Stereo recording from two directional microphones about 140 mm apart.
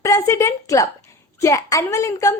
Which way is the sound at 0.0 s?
20° left (ahead or behind).